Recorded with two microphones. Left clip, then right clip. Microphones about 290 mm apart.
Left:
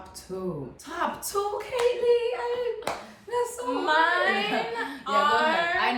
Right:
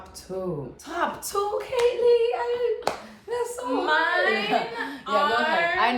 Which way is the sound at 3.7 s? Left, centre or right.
Centre.